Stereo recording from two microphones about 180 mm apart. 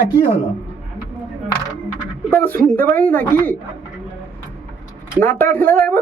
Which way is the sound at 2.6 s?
10° left (ahead or behind).